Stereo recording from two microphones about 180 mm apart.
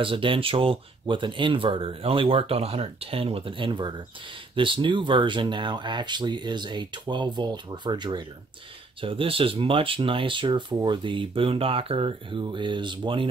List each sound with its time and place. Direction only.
0.0 s speech: 30° right (ahead or behind)